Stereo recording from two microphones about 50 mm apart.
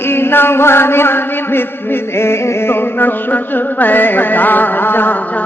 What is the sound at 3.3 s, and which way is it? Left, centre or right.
Music, left.